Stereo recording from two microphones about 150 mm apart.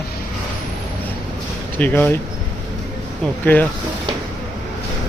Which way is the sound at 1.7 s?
10° left (ahead or behind).